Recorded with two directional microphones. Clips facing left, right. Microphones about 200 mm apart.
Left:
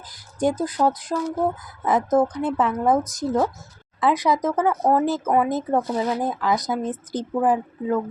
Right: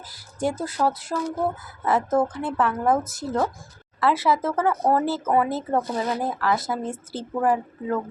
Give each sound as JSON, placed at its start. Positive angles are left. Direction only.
{"t": 0.3, "sound": "speech", "side_deg": 15}